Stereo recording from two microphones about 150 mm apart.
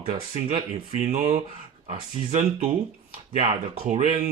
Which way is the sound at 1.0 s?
50° right (ahead or behind).